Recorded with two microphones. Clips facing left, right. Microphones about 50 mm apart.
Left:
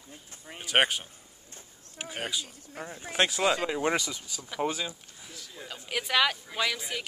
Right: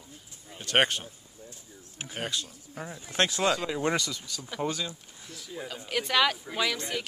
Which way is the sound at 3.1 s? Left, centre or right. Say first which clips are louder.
Even; centre.